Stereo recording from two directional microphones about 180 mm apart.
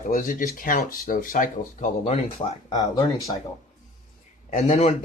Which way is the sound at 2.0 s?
30° left (ahead or behind).